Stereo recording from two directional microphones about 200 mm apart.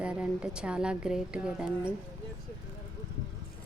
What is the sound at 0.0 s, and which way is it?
A woman's voice, 5° right (ahead or behind).